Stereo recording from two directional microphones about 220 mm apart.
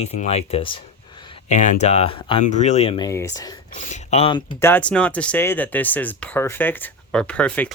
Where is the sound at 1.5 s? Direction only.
35° left (ahead or behind); by 3.6 s 15° left (ahead or behind).